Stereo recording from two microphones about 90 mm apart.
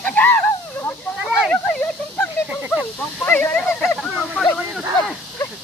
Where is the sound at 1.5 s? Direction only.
20° left (ahead or behind).